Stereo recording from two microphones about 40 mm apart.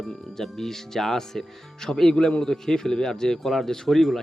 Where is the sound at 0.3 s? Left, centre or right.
Centre.